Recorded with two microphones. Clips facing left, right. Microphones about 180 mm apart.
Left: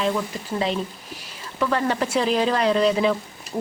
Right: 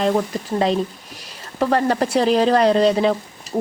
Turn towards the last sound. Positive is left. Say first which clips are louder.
# right 5 dB
turn(degrees=-35)  # may be behind; listen again after turning